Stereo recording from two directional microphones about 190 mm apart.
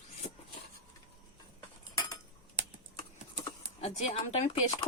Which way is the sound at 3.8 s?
35° left (ahead or behind).